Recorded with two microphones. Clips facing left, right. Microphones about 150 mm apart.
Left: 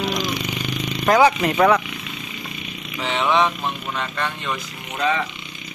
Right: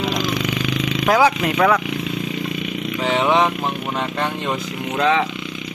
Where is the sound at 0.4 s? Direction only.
90° right.